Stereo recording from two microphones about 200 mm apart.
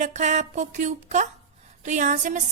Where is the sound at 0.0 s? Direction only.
35° right (ahead or behind).